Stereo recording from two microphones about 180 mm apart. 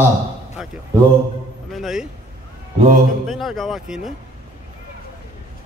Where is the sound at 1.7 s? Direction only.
Centre (ahead or behind).